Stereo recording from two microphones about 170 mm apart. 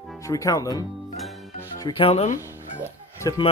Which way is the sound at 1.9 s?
35° left (ahead or behind).